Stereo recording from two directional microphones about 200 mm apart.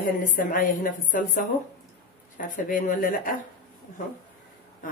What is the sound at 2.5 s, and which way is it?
Speech, 40° left (ahead or behind).